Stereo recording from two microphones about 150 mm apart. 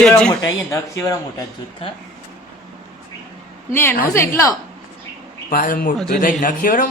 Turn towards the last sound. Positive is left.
turn(degrees=65)  # may be behind; listen again after turning